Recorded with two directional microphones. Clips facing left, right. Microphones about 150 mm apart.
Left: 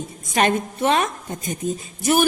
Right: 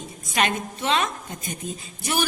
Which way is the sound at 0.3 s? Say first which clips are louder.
Left 5 dB; 50° left (ahead or behind).